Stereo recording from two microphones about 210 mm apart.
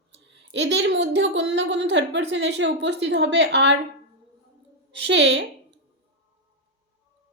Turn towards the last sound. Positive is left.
turn(degrees=-60)  # may be behind; listen again after turning